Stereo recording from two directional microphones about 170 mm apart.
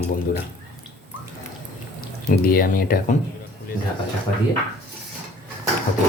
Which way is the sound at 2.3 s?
60° left (ahead or behind).